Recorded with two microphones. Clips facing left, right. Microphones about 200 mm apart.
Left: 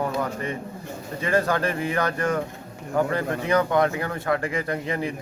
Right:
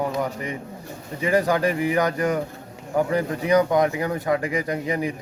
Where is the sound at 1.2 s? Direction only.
15° right (ahead or behind).